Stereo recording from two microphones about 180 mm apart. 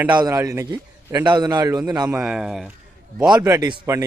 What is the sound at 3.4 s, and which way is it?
Speech, 15° right (ahead or behind).